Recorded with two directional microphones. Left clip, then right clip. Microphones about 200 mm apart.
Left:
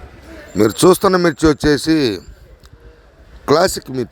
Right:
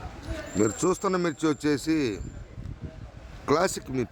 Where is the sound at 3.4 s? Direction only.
35° left (ahead or behind).